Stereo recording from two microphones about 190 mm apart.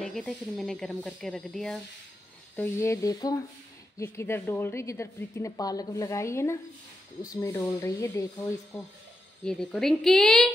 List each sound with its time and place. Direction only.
0.0 s a woman's voice: centre (ahead or behind)
9.4 s speech: 5° left (ahead or behind)